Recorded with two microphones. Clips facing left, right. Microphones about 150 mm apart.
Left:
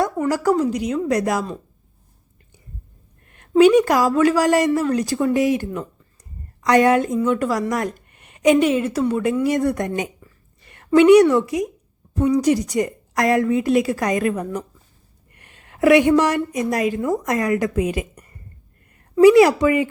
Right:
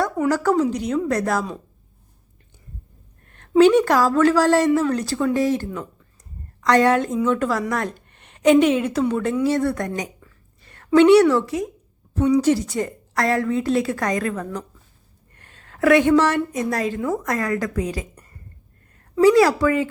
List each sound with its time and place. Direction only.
0.3 s a woman's voice: 10° left (ahead or behind)
3.6 s a woman's voice: 10° left (ahead or behind)
15.4 s a sound: 15° left (ahead or behind)
16.6 s a woman's voice: 15° left (ahead or behind)